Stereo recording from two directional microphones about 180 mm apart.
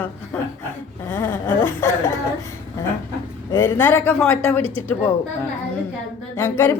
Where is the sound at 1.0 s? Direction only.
15° left (ahead or behind).